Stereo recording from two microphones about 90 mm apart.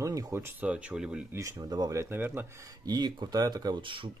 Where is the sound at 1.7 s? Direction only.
45° right (ahead or behind).